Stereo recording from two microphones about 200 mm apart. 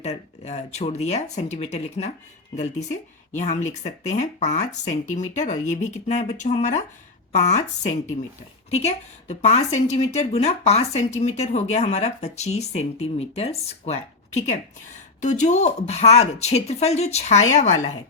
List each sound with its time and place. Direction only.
0.0 s speech: 35° left (ahead or behind)